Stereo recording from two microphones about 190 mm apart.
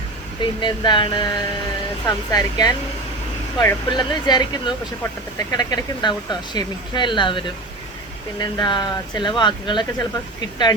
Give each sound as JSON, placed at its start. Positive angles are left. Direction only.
{"t": 0.6, "sound": "speech", "side_deg": 25}